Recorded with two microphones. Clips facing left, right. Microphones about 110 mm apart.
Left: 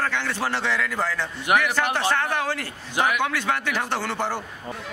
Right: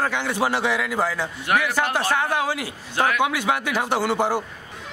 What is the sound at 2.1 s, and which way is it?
Speech, 10° right (ahead or behind).